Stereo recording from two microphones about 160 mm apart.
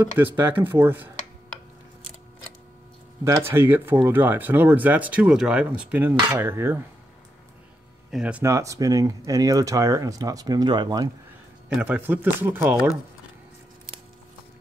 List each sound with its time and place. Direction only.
0.0 s speech: 10° right (ahead or behind)
3.3 s speech: 15° right (ahead or behind)
8.1 s speech: 5° right (ahead or behind); by 11.1 s 25° right (ahead or behind)
11.7 s speech: 10° right (ahead or behind)